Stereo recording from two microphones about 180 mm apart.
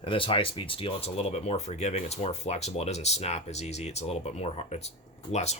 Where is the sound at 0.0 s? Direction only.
30° left (ahead or behind).